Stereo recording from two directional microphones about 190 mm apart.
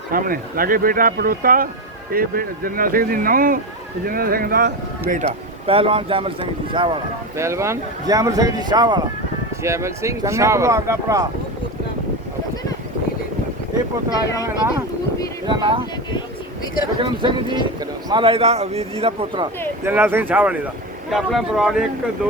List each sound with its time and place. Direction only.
0.1 s speech: 50° right (ahead or behind)
5.2 s speech: 30° right (ahead or behind)
7.3 s speech: 15° right (ahead or behind)
15.4 s speech: 25° right (ahead or behind)
16.8 s a man's voice: 25° right (ahead or behind)
19.8 s speech: 10° right (ahead or behind)